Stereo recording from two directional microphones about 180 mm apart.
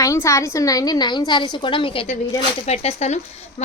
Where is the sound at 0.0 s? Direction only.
15° left (ahead or behind).